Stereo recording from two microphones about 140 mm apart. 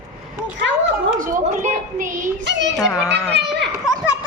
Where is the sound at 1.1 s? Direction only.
70° right (ahead or behind).